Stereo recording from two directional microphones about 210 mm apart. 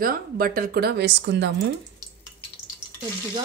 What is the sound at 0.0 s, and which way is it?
Speech, 45° right (ahead or behind).